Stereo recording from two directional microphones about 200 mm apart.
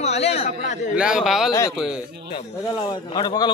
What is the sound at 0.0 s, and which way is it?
Speech, 30° left (ahead or behind).